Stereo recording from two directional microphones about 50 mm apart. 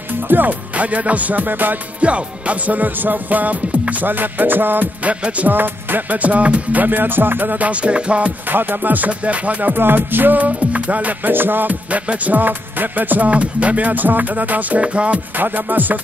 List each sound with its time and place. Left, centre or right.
0.3 s music: right
2.0 s music: right
5.0 s music: right
5.5 s music: right
8.5 s music: right
11.9 s music: right
13.3 s music: right
15.3 s music: right